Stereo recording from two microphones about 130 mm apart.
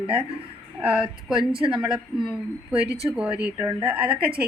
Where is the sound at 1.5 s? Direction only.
40° right (ahead or behind).